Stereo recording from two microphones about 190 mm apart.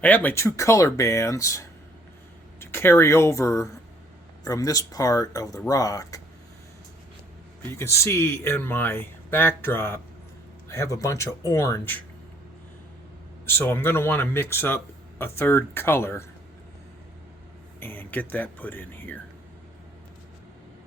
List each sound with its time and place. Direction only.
0.0 s speech: 10° left (ahead or behind)
7.8 s speech: 15° left (ahead or behind)
13.4 s speech: 10° left (ahead or behind)
17.7 s speech: 10° left (ahead or behind)